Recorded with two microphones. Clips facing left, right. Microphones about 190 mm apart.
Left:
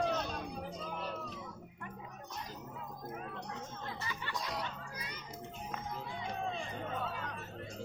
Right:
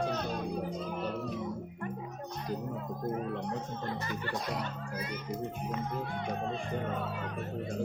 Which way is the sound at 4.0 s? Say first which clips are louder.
Right 5 dB; 50° right (ahead or behind).